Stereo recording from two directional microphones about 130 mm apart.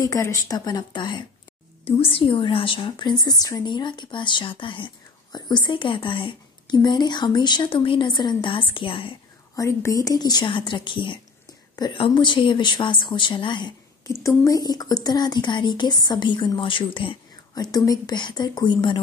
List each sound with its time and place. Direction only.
0.0 s a woman's voice: 25° left (ahead or behind); by 9.1 s 40° left (ahead or behind)
9.6 s a woman's voice: 25° left (ahead or behind)
14.2 s a woman's voice: 25° left (ahead or behind); by 17.2 s 40° left (ahead or behind)
17.6 s a woman's voice: 30° left (ahead or behind)